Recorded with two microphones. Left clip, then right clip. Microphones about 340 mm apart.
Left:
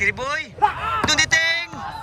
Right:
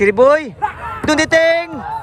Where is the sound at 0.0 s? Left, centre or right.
Centre.